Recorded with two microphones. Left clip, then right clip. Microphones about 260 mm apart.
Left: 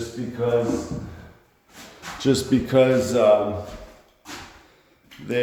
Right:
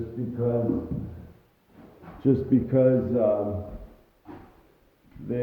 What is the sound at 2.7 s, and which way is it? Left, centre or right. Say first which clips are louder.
Speech: left 5 dB; left.